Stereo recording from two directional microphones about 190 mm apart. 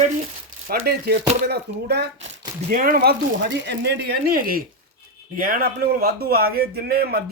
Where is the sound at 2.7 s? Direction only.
45° right (ahead or behind).